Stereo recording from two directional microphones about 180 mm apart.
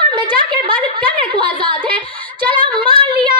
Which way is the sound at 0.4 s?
25° right (ahead or behind).